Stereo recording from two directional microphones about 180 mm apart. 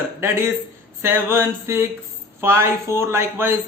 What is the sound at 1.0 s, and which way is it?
Speech, 15° right (ahead or behind).